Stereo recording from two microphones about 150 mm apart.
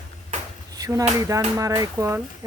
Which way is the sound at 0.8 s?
20° right (ahead or behind).